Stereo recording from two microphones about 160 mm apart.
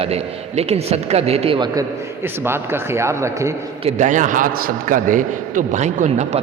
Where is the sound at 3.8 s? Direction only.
45° right (ahead or behind).